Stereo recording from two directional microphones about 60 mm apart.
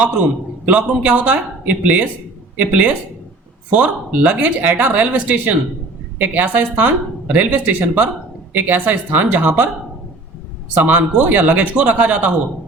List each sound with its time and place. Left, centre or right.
0.0 s speech: centre
10.8 s speech: right